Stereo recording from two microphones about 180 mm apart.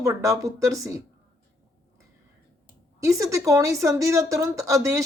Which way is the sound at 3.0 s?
15° right (ahead or behind).